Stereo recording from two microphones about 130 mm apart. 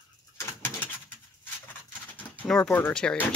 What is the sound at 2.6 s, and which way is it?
Speech, 15° left (ahead or behind).